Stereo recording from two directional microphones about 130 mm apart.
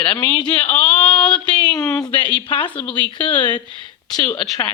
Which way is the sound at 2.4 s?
40° left (ahead or behind).